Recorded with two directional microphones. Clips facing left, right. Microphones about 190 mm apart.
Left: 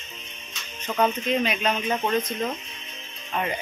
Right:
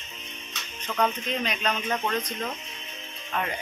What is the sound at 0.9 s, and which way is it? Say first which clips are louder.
Speech: left 3 dB; 20° left (ahead or behind).